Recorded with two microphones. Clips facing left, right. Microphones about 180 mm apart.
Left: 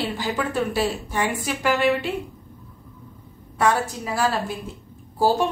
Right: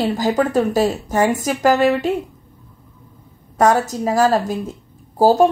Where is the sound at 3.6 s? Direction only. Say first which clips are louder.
Right 6 dB; 40° right (ahead or behind).